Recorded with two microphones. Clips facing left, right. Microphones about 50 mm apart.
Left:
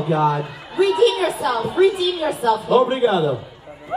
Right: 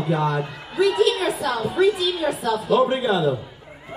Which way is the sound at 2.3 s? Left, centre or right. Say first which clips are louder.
Left 4 dB; left.